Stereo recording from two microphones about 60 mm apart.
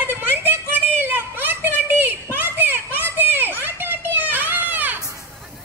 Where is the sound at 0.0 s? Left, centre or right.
Right.